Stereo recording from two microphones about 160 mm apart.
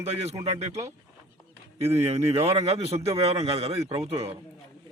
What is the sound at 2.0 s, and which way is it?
A man's voice, 40° right (ahead or behind).